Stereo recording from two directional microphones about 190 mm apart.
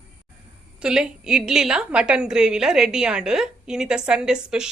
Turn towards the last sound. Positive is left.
turn(degrees=-5)  # may be behind; listen again after turning